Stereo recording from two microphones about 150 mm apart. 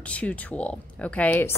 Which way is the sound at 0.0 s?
10° left (ahead or behind).